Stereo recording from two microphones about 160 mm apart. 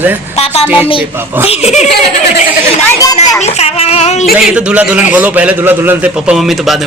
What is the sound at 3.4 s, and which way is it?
Speech, 40° left (ahead or behind).